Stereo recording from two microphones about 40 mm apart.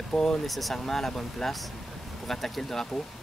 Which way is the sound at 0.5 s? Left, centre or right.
Centre.